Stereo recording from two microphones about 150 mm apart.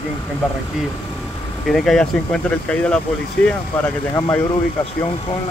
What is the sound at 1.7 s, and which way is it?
Speech, centre (ahead or behind).